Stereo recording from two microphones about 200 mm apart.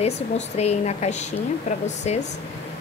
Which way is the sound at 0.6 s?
35° left (ahead or behind).